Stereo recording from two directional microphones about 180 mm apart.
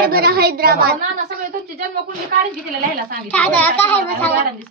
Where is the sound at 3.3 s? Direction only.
10° left (ahead or behind).